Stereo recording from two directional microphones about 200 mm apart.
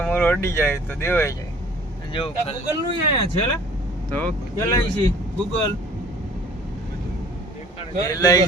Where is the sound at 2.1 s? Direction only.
30° left (ahead or behind).